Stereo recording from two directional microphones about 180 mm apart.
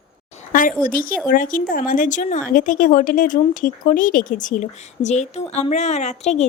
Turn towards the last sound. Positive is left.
turn(degrees=40)  # may be behind; listen again after turning